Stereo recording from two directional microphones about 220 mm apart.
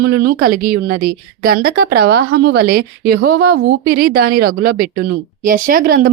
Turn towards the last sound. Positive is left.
turn(degrees=-40)  # may be behind; listen again after turning